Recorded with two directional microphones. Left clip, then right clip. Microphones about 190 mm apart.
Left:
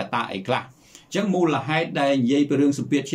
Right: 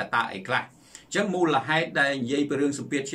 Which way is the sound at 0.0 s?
15° left (ahead or behind).